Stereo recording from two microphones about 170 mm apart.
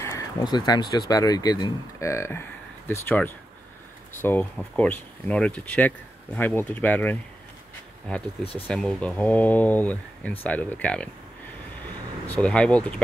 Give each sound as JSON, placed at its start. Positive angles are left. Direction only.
{"t": 0.0, "sound": "speech", "side_deg": 20}
{"t": 12.3, "sound": "speech", "side_deg": 5}